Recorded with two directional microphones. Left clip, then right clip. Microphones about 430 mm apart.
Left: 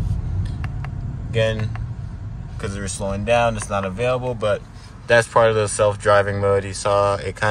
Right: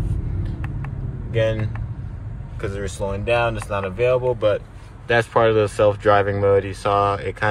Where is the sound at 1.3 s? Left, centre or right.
Centre.